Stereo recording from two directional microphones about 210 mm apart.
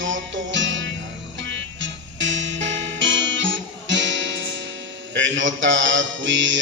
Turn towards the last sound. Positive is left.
turn(degrees=-60)  # may be behind; listen again after turning